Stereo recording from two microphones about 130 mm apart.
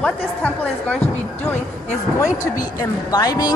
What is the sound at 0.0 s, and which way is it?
A woman's voice, 10° left (ahead or behind).